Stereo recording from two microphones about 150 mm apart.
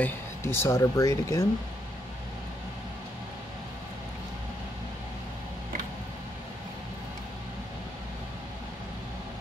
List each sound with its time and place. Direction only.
0.0 s speech: 15° left (ahead or behind)